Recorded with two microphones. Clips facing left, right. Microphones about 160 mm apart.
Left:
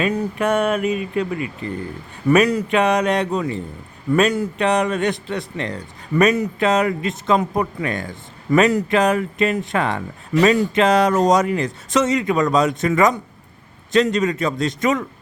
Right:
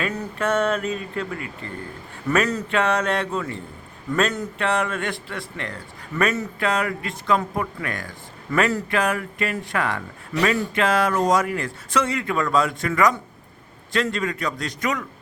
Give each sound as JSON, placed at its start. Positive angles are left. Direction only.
{"t": 0.0, "sound": "a man's voice", "side_deg": 15}